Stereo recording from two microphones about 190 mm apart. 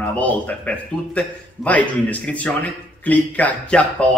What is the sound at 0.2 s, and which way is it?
A man's voice, 10° left (ahead or behind).